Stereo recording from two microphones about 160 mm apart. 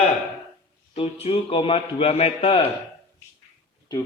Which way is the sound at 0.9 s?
40° left (ahead or behind).